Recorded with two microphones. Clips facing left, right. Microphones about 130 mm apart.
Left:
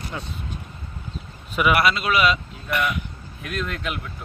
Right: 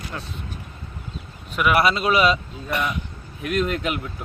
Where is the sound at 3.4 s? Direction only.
5° right (ahead or behind).